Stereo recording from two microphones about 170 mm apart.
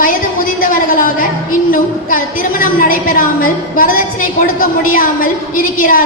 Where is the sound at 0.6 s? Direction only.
55° left (ahead or behind).